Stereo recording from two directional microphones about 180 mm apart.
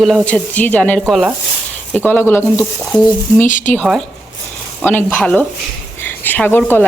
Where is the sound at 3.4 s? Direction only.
45° left (ahead or behind).